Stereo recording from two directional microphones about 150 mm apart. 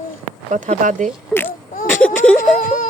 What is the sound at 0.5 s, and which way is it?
Speech, 55° right (ahead or behind).